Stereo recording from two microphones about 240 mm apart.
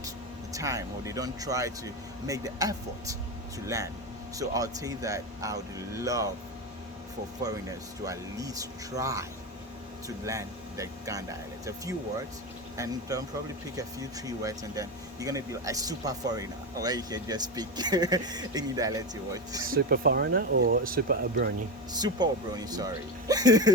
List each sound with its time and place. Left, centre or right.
0.5 s speech: centre
4.4 s speech: centre
7.4 s speech: centre
10.2 s speech: centre
14.3 s speech: centre
19.7 s speech: right
22.0 s speech: centre